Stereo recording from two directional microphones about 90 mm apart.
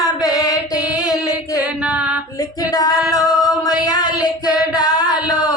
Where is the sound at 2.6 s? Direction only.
45° left (ahead or behind).